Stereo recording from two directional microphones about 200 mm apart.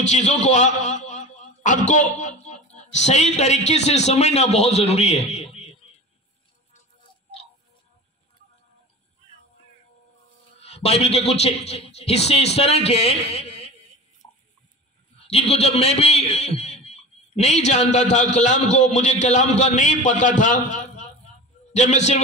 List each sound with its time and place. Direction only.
0.0 s a man's voice: 35° left (ahead or behind)
10.6 s a man's voice: 30° left (ahead or behind)
14.2 s a sound: 25° left (ahead or behind)
15.1 s a man's voice: 30° left (ahead or behind)